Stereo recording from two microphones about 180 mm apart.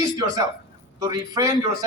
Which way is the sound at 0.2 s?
20° right (ahead or behind).